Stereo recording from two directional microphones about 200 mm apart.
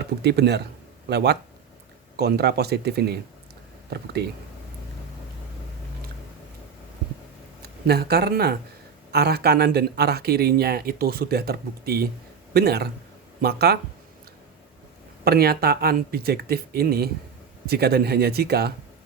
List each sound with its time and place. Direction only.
0.0 s speech: 55° right (ahead or behind)
7.6 s speech: 55° right (ahead or behind)
15.2 s speech: 50° right (ahead or behind)